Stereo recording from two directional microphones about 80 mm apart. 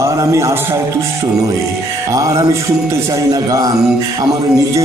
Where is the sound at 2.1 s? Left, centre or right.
Right.